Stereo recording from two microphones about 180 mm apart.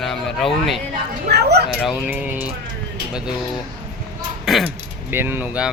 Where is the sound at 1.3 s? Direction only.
65° right (ahead or behind).